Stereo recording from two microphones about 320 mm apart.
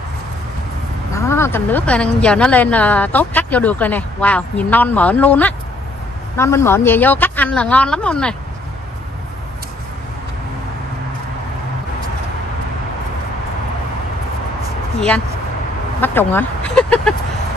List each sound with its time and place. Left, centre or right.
1.1 s a woman's voice: centre
15.0 s speech: centre